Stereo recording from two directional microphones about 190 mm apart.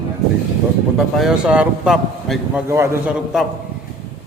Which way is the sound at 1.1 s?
5° right (ahead or behind).